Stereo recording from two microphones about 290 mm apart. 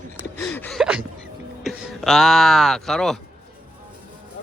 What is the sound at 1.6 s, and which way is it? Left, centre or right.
Speech, centre.